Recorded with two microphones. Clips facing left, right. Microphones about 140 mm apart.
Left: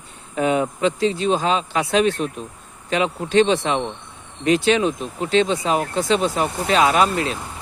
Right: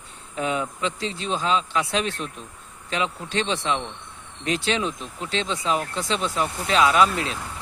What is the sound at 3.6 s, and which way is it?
Speech, 55° left (ahead or behind).